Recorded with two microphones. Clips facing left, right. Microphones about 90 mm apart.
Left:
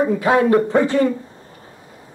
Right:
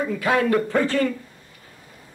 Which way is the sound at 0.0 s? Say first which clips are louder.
Left 6 dB; 25° left (ahead or behind).